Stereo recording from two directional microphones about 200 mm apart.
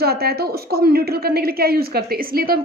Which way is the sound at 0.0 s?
50° right (ahead or behind).